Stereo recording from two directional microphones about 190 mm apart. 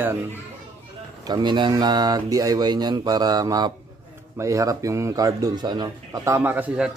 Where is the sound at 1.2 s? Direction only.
25° right (ahead or behind).